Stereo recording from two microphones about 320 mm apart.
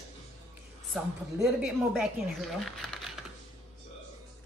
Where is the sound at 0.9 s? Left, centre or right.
Centre.